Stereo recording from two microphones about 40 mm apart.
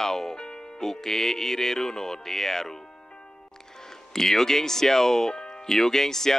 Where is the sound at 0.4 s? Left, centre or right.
Centre.